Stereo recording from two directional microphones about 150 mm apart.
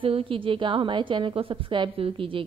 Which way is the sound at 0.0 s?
35° right (ahead or behind).